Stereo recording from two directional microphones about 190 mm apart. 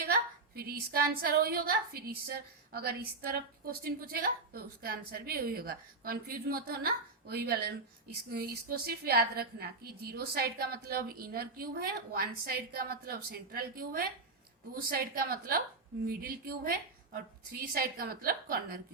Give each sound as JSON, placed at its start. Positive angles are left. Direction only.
{"t": 0.0, "sound": "a woman's voice", "side_deg": -55}